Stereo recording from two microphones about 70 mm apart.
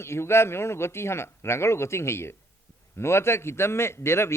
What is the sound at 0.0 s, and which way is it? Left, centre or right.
A man's voice, left.